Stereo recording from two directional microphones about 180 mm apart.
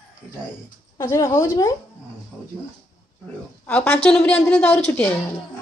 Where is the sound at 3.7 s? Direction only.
10° left (ahead or behind).